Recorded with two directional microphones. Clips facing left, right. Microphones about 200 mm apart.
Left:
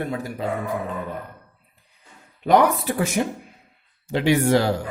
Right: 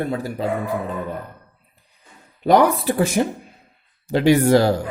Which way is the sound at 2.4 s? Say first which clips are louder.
Right 2 dB; 35° right (ahead or behind).